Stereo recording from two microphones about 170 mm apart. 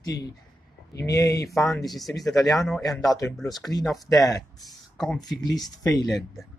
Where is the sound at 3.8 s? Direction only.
Centre (ahead or behind).